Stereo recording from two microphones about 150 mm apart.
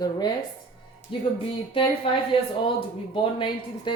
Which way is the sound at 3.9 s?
30° left (ahead or behind).